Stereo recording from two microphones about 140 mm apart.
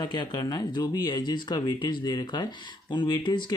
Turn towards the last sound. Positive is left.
turn(degrees=30)  # may be behind; listen again after turning